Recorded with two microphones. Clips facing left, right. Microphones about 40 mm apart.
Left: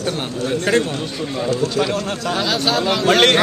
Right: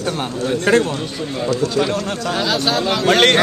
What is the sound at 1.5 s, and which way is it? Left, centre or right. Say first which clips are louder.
Speech: right 2 dB; left.